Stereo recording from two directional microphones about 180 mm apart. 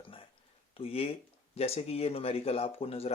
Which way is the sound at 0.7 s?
30° left (ahead or behind).